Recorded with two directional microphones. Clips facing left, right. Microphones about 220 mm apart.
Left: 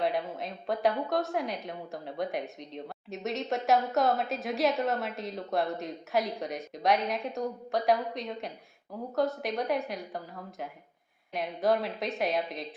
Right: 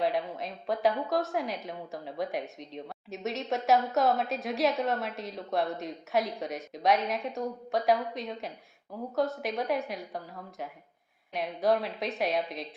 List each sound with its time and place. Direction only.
0.0 s a woman's voice: centre (ahead or behind)